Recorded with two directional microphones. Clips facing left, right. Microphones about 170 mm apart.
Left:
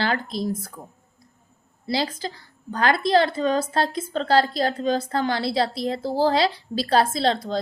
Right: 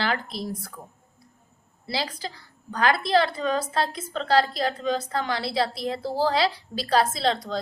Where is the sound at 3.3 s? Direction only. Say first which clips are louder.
Left 3 dB; 30° left (ahead or behind).